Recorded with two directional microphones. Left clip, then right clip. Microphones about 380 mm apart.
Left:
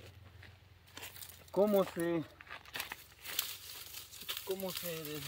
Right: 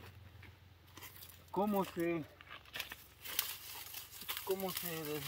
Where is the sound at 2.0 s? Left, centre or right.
Centre.